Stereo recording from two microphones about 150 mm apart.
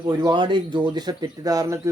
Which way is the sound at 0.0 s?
25° right (ahead or behind).